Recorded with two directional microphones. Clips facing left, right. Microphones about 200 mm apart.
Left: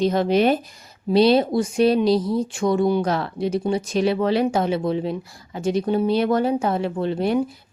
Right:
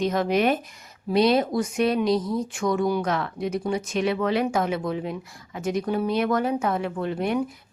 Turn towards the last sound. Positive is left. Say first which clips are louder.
# left 4 dB
turn(degrees=30)  # may be behind; listen again after turning